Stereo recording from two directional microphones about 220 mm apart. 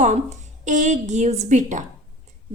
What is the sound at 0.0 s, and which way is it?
A woman's voice, 35° right (ahead or behind).